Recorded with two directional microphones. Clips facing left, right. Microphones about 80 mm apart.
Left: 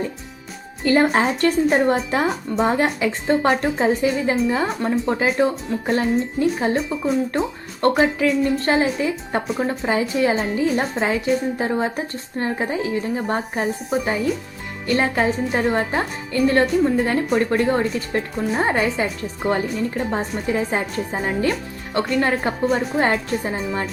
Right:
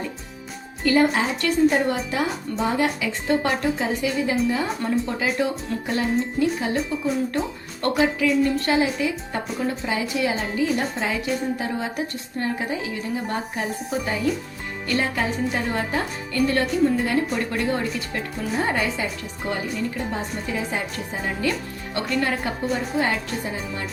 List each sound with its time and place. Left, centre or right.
0.9 s a woman's voice: left